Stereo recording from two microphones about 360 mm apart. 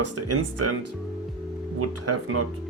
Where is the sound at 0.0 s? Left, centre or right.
Right.